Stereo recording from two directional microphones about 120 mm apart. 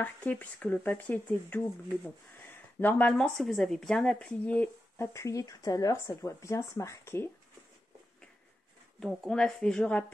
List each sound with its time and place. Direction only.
0.0 s speech: 15° left (ahead or behind)
9.0 s speech: 5° left (ahead or behind)